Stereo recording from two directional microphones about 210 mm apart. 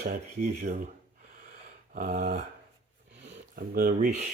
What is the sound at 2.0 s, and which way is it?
Speech, 45° right (ahead or behind).